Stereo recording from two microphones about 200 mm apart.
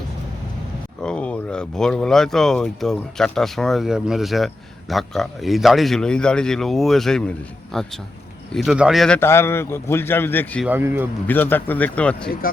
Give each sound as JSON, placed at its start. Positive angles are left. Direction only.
{"t": 1.0, "sound": "a man's voice", "side_deg": 5}
{"t": 10.7, "sound": "a man's voice", "side_deg": -10}
{"t": 11.3, "sound": "a man's voice", "side_deg": 10}